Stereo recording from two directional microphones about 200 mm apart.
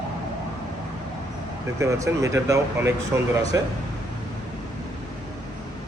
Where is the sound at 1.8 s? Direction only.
15° right (ahead or behind).